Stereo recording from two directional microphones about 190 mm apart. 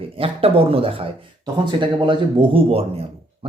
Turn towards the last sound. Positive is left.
turn(degrees=-30)  # may be behind; listen again after turning